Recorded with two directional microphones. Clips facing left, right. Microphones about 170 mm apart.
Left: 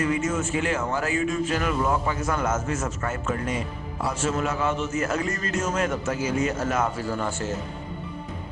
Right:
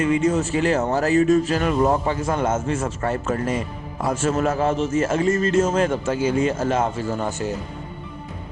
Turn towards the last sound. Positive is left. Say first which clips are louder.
# right 3 dB
turn(degrees=-15)  # may be behind; listen again after turning